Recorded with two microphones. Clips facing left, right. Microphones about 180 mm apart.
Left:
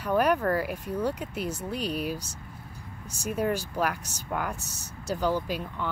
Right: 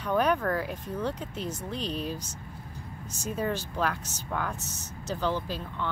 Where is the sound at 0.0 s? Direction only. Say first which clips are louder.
Left 2 dB; 10° left (ahead or behind).